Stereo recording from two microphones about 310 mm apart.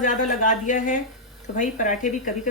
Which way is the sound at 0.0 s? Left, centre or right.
Left.